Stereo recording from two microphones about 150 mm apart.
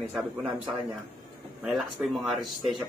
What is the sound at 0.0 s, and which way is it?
Speech, 10° right (ahead or behind).